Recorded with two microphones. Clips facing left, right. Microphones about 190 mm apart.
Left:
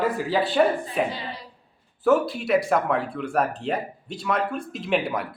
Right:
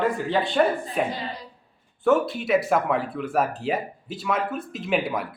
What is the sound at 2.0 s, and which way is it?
Speech, centre (ahead or behind).